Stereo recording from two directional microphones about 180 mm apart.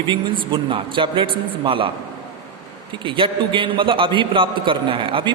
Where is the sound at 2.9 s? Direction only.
30° right (ahead or behind).